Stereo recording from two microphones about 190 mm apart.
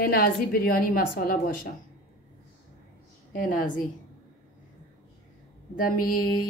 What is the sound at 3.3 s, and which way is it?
Speech, 45° left (ahead or behind).